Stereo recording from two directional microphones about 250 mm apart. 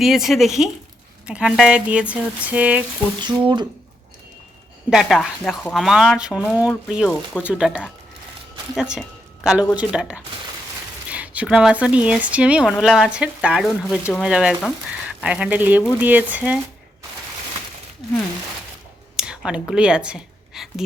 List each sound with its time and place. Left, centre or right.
0.0 s speech: centre
3.2 s speech: centre
4.9 s speech: centre
19.1 s a sound: centre